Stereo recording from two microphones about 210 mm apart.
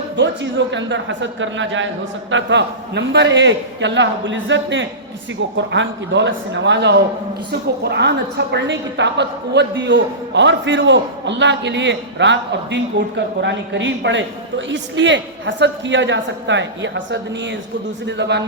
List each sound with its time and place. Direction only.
0.2 s a woman's voice: 60° right (ahead or behind)